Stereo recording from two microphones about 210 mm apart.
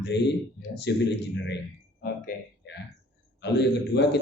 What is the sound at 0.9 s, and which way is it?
Speech, 55° left (ahead or behind).